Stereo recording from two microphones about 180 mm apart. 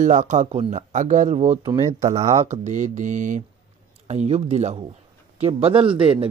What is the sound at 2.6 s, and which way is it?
Mantra, 45° right (ahead or behind).